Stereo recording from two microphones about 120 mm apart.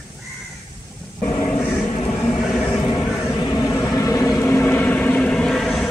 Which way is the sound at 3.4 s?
30° left (ahead or behind).